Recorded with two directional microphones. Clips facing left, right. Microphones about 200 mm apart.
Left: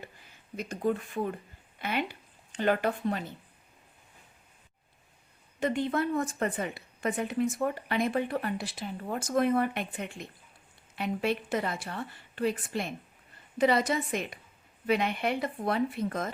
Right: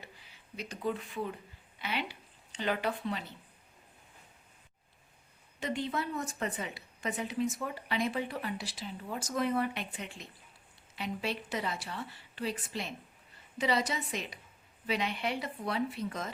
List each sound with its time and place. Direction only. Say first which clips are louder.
0.0 s speech: left 5 dB; 50° left (ahead or behind)
5.5 s a woman's voice: left 6 dB; 50° left (ahead or behind)